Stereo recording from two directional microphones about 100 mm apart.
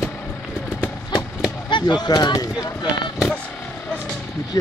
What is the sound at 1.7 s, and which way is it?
Speech, 50° left (ahead or behind).